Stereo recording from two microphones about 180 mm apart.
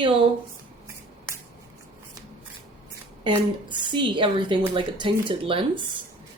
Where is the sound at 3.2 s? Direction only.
25° right (ahead or behind).